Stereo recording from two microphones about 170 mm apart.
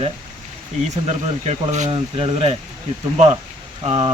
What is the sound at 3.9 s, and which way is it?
Speech, 30° right (ahead or behind).